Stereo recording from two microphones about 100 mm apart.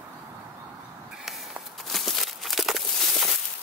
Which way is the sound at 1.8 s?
Centre (ahead or behind).